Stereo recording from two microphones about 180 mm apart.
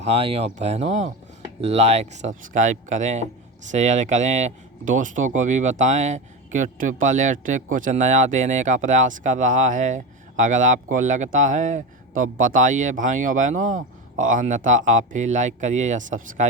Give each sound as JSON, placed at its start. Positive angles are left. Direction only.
{"t": 0.0, "sound": "speech", "side_deg": -35}